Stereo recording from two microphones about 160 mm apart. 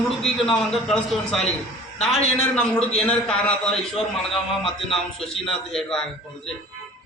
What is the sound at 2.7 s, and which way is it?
A man's voice, 5° left (ahead or behind).